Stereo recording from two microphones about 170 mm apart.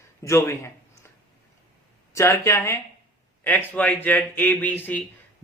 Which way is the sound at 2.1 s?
15° left (ahead or behind).